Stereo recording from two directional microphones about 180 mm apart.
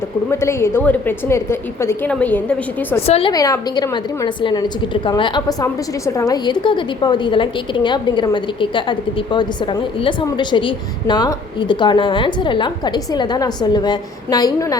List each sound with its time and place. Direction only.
0.3 s a woman's voice: 15° left (ahead or behind)
3.1 s a woman's voice: 30° left (ahead or behind)
3.3 s a woman's voice: 20° left (ahead or behind)